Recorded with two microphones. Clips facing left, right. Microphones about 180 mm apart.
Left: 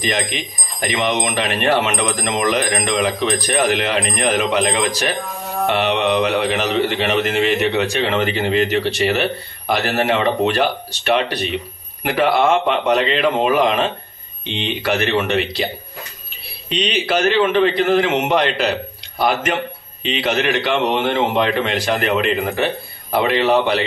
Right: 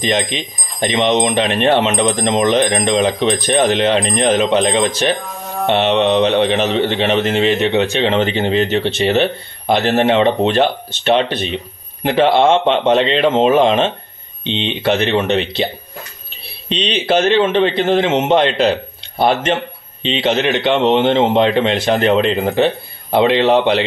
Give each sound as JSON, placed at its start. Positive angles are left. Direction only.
{"t": 0.9, "sound": "a man's voice", "side_deg": -25}
{"t": 5.1, "sound": "music", "side_deg": 0}
{"t": 5.7, "sound": "a man's voice", "side_deg": -25}